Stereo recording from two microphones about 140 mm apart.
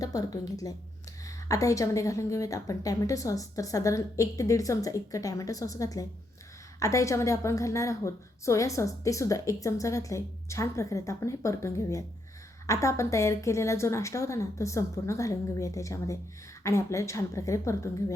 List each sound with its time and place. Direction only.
0.0 s a woman's voice: 25° left (ahead or behind)